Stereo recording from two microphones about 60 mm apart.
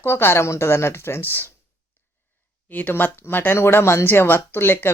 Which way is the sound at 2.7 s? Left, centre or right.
Left.